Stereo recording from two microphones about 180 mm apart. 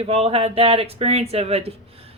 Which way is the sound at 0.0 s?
30° right (ahead or behind).